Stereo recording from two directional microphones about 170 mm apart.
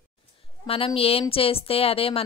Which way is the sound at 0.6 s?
35° left (ahead or behind).